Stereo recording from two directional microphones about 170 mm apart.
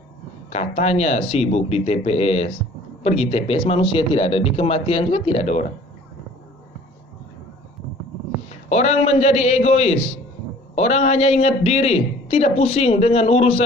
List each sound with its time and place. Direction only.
0.5 s a man's voice: 40° left (ahead or behind)
8.6 s a man's voice: 40° left (ahead or behind)